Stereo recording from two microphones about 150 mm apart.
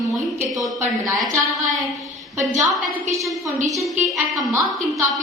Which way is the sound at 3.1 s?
Centre (ahead or behind).